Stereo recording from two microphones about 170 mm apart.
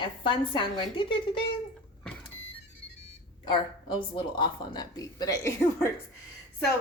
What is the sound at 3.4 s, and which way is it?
Speech, 25° left (ahead or behind).